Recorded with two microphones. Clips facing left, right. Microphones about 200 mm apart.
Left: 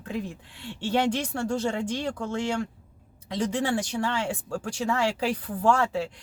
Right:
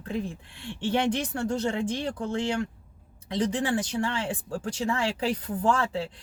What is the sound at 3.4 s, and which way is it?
Speech, 20° right (ahead or behind).